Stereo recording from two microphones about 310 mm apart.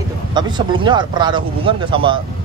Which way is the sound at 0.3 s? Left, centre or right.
Centre.